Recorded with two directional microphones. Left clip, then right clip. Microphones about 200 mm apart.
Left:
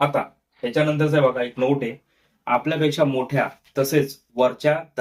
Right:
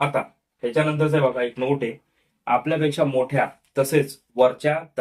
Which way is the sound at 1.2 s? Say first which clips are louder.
Left 2 dB; 5° right (ahead or behind).